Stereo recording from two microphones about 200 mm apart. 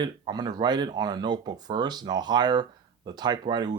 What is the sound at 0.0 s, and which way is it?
Speech, 20° right (ahead or behind).